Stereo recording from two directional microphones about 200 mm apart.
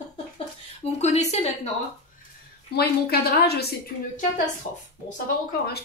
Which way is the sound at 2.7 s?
50° left (ahead or behind).